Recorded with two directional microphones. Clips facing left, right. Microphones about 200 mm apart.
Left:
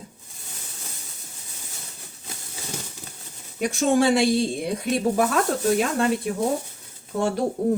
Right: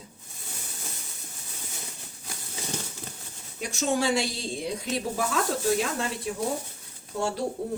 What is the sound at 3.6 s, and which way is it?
Speech, 55° left (ahead or behind).